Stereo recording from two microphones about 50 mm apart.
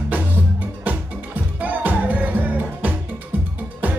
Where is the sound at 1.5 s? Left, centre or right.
Right.